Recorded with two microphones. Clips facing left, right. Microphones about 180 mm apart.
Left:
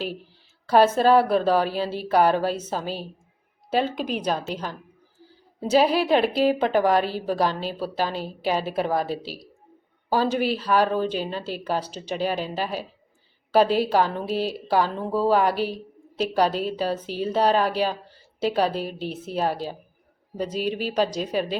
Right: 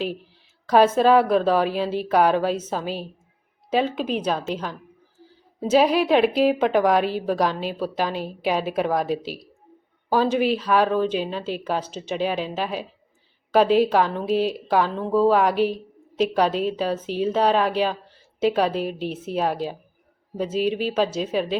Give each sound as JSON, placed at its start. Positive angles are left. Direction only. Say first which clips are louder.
{"t": 0.7, "sound": "a woman's voice", "louder": "right 1 dB", "side_deg": 0}
{"t": 4.0, "sound": "a woman's voice", "louder": "right 3 dB", "side_deg": -5}
{"t": 4.3, "sound": "a woman's voice", "louder": "right 1 dB", "side_deg": 5}
{"t": 5.7, "sound": "a woman's voice", "louder": "right 2 dB", "side_deg": 0}
{"t": 9.0, "sound": "a woman's voice", "louder": "right 4 dB", "side_deg": 35}
{"t": 10.1, "sound": "a woman's voice", "louder": "right 2 dB", "side_deg": 0}
{"t": 18.8, "sound": "a woman's voice", "louder": "right 3 dB", "side_deg": 35}
{"t": 19.1, "sound": "a woman's voice", "louder": "even", "side_deg": -5}